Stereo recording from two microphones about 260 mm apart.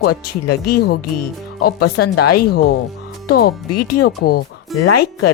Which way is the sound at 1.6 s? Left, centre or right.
Left.